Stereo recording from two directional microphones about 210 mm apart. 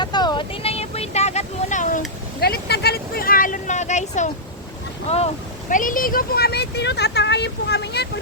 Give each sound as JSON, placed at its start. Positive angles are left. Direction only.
{"t": 0.0, "sound": "vehicle", "side_deg": 20}
{"t": 2.4, "sound": "a sound", "side_deg": 50}
{"t": 5.0, "sound": "speech", "side_deg": 30}